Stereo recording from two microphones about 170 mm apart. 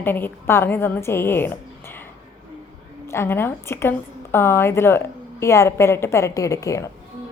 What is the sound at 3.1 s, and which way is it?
A woman's voice, 15° left (ahead or behind).